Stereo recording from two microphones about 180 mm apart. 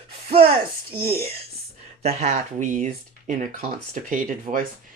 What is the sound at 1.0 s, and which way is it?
Speech, 35° right (ahead or behind).